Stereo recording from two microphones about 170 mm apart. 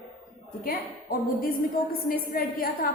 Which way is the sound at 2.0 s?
60° left (ahead or behind).